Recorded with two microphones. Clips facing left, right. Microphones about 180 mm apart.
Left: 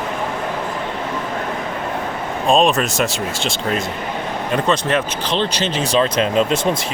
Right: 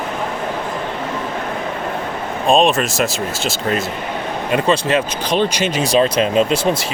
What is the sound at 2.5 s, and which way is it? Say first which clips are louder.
Speech: right 1 dB; centre (ahead or behind).